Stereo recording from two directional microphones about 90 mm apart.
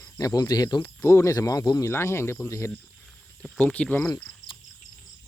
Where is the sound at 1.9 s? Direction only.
30° left (ahead or behind).